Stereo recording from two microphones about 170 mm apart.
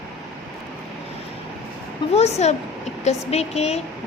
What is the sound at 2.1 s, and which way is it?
Speech, 40° left (ahead or behind).